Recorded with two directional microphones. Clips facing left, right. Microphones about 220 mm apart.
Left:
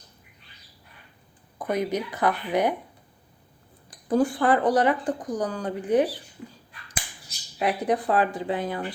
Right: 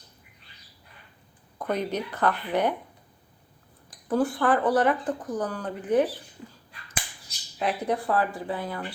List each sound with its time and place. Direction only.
1.5 s speech: 10° left (ahead or behind)
4.1 s speech: 15° left (ahead or behind)
7.6 s speech: 15° left (ahead or behind)